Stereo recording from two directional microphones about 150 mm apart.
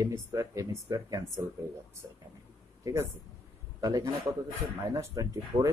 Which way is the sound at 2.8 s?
20° right (ahead or behind).